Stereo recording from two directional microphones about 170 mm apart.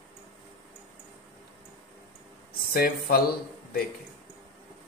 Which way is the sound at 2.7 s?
60° left (ahead or behind).